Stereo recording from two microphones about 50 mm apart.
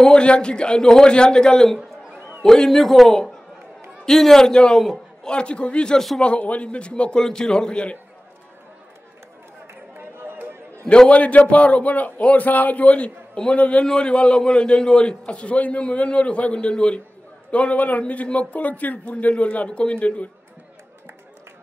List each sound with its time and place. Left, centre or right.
0.0 s a man's voice: centre
5.3 s a man's voice: left
5.9 s a man's voice: centre
6.2 s a man's voice: left
9.9 s chatter: right
10.9 s a man's voice: left